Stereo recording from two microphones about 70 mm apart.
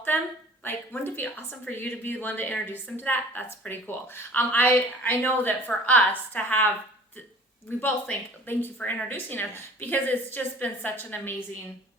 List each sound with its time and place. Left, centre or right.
0.6 s a woman's voice: left
7.8 s a woman's voice: left